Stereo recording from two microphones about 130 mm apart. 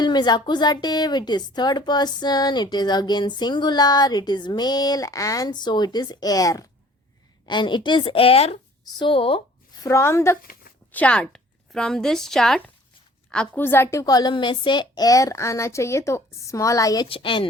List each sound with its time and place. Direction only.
0.0 s a woman's voice: 35° left (ahead or behind); by 8.5 s 50° left (ahead or behind)
8.8 s speech: 40° left (ahead or behind)
9.8 s a woman's voice: 20° left (ahead or behind)
10.9 s a woman's voice: 10° left (ahead or behind); by 17.1 s 30° left (ahead or behind)
17.1 s a woman's voice: 40° left (ahead or behind)